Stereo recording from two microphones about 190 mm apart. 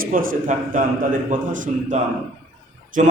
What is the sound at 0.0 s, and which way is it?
A man's voice, 45° right (ahead or behind).